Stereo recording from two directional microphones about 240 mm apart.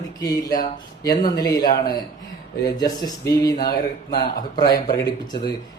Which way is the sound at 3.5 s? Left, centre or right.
Left.